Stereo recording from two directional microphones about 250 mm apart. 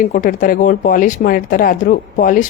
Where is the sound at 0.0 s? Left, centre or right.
Left.